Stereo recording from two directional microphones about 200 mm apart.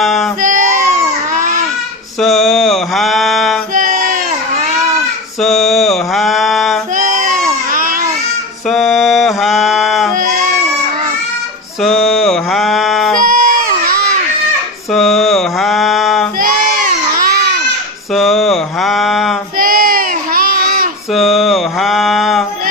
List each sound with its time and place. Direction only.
0.0 s child singing: centre (ahead or behind)
0.4 s a sound: 40° right (ahead or behind)
2.2 s mantra: centre (ahead or behind)
3.8 s a sound: 40° right (ahead or behind)
5.4 s mantra: centre (ahead or behind)
6.9 s a sound: 40° right (ahead or behind)
8.7 s mantra: centre (ahead or behind)
11.8 s music: centre (ahead or behind)
13.2 s baby cry: 45° right (ahead or behind)
14.9 s mantra: centre (ahead or behind)
16.4 s baby cry: 45° right (ahead or behind)
18.1 s a sound: centre (ahead or behind)
19.5 s child singing: 45° right (ahead or behind)
21.1 s mantra: centre (ahead or behind)